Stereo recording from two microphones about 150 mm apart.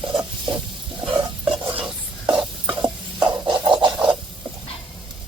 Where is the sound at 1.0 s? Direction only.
35° right (ahead or behind).